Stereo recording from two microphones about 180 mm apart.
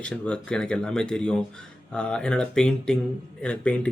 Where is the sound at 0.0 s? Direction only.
5° left (ahead or behind).